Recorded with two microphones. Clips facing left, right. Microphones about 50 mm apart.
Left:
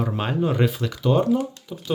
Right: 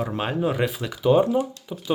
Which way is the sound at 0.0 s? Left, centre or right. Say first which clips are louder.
Left 1 dB; centre.